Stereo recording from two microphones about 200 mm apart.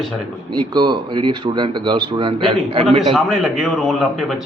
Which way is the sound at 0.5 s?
20° right (ahead or behind).